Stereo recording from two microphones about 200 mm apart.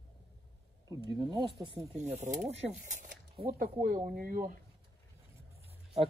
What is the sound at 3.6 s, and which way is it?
Speech, 45° right (ahead or behind).